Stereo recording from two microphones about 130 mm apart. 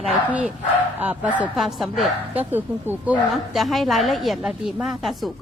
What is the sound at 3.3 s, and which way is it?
A woman's voice, centre (ahead or behind).